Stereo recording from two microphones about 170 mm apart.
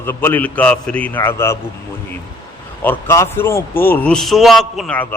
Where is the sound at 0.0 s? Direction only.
15° left (ahead or behind).